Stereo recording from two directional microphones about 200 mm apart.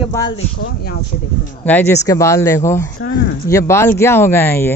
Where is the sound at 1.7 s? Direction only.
10° left (ahead or behind).